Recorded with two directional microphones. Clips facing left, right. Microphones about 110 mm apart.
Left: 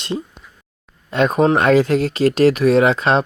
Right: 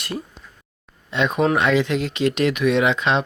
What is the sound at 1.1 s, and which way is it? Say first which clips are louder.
Speech: left 4 dB; 45° left (ahead or behind).